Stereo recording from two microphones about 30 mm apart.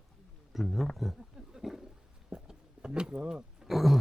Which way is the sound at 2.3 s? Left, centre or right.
Right.